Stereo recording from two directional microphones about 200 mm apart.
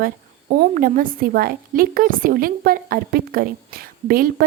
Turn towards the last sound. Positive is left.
turn(degrees=-45)  # may be behind; listen again after turning